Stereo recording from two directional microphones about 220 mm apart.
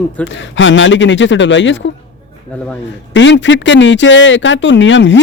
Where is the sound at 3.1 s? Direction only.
55° left (ahead or behind).